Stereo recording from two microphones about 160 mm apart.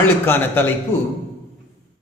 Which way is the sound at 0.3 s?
15° left (ahead or behind).